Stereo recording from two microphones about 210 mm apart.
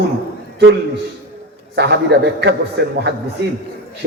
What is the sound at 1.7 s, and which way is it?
A man's voice, 55° right (ahead or behind).